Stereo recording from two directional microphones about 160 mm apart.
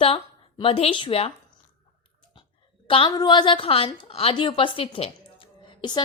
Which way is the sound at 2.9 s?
30° left (ahead or behind).